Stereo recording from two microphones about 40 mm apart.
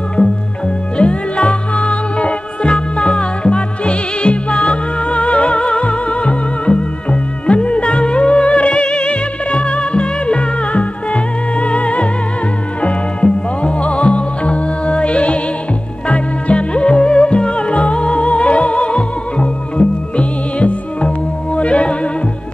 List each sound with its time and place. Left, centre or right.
0.9 s music: left